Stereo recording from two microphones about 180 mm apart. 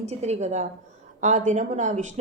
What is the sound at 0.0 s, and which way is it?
A woman's voice, 35° right (ahead or behind).